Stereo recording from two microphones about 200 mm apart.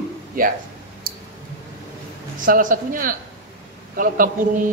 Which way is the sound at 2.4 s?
40° right (ahead or behind).